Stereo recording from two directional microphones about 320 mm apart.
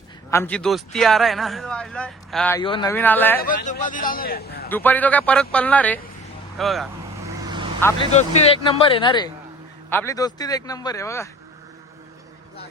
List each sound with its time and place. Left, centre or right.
0.3 s speech: centre
3.4 s a man's voice: left
4.7 s speech: centre
8.1 s speech: centre